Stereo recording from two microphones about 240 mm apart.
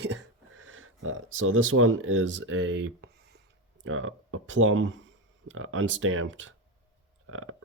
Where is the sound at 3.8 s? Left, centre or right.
Right.